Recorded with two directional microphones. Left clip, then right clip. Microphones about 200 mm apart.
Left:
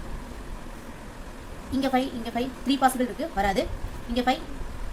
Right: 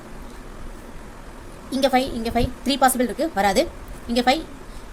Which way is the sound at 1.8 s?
45° right (ahead or behind).